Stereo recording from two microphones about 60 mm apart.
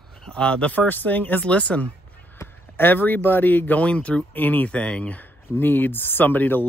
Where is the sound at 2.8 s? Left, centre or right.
Left.